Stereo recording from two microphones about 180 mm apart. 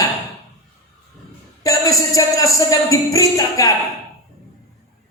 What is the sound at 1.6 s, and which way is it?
Speech, 20° left (ahead or behind).